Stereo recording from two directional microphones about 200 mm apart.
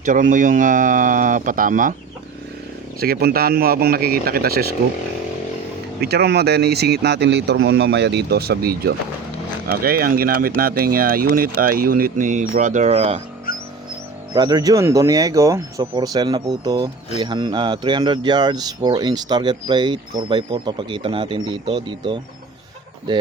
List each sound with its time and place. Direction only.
0.0 s speech: 40° right (ahead or behind)
3.0 s speech: 50° right (ahead or behind)
6.0 s speech: 55° right (ahead or behind); by 13.2 s 30° right (ahead or behind)
14.3 s speech: 20° right (ahead or behind)